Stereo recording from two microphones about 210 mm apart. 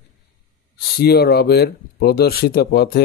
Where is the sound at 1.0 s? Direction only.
50° left (ahead or behind).